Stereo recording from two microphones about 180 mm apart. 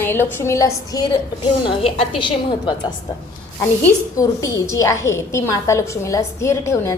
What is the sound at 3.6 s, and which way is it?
A woman's voice, 15° left (ahead or behind).